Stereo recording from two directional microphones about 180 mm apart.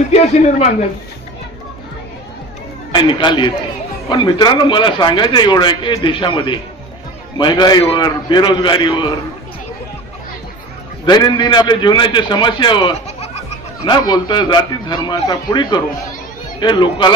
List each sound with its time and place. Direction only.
0.1 s a man's voice: 35° left (ahead or behind)
2.9 s a man's voice: 25° left (ahead or behind)
11.1 s a man's voice: 25° left (ahead or behind)
13.7 s a man's voice: 20° left (ahead or behind)